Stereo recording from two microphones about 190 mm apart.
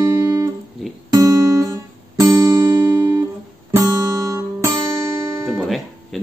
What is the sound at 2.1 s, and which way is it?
Music, 15° right (ahead or behind).